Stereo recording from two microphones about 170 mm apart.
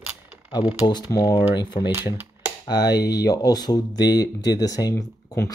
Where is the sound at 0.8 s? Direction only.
25° left (ahead or behind).